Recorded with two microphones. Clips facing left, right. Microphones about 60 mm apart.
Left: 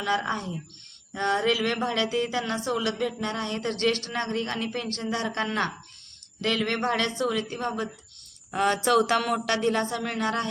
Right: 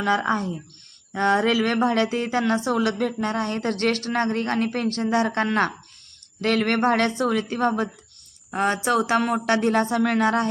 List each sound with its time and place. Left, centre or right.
0.0 s speech: right
8.5 s speech: right
10.2 s speech: right